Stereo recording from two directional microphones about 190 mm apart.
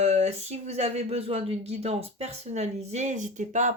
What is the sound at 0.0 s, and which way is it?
Speech, 35° right (ahead or behind).